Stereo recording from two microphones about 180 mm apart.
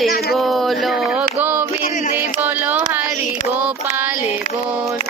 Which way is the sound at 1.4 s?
10° right (ahead or behind).